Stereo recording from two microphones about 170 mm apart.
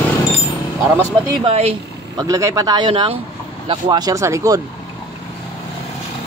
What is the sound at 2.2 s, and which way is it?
Speech, 20° right (ahead or behind).